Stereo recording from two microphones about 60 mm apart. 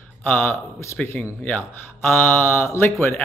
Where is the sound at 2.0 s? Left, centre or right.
Left.